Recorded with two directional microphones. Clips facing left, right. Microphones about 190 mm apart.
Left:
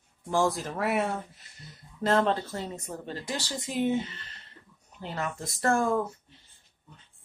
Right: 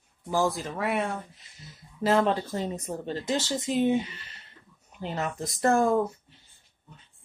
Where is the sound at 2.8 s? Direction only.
20° right (ahead or behind).